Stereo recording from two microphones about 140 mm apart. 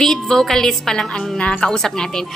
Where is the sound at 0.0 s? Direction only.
5° left (ahead or behind).